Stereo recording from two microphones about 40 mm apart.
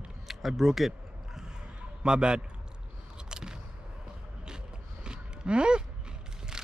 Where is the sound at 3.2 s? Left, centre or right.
Centre.